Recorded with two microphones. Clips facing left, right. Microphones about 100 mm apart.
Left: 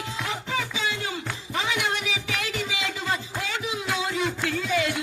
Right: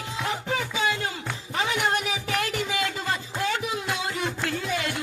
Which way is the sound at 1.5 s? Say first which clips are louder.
Right 2 dB; 45° right (ahead or behind).